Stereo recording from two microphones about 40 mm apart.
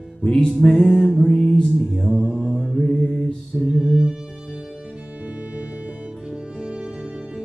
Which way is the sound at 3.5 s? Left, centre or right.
Centre.